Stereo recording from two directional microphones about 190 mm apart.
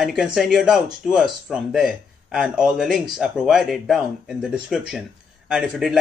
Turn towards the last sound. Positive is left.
turn(degrees=0)  # may be behind; listen again after turning